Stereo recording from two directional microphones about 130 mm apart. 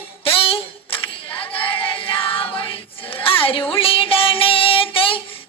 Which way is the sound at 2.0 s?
40° left (ahead or behind).